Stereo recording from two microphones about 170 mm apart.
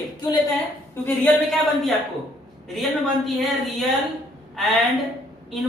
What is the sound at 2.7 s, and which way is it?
A woman's voice, centre (ahead or behind).